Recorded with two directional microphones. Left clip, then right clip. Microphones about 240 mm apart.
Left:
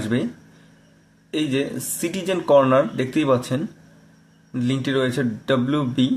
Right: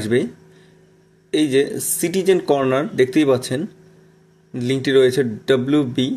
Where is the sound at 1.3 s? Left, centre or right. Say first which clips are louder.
Right 6 dB; right.